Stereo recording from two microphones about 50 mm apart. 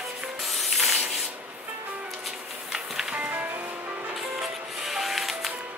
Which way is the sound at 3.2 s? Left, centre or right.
Right.